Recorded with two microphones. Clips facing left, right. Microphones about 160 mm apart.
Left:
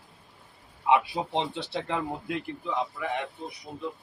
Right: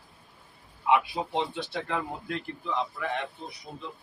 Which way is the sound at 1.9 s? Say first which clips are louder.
Left 2 dB; 15° left (ahead or behind).